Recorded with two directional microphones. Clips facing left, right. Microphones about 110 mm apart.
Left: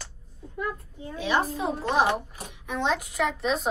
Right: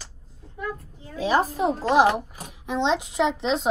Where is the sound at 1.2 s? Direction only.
40° right (ahead or behind).